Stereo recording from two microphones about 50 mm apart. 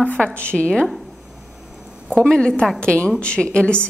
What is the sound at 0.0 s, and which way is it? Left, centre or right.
Speech, left.